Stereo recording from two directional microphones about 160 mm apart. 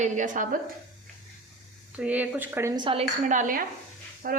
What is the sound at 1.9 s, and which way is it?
Speech, 10° right (ahead or behind).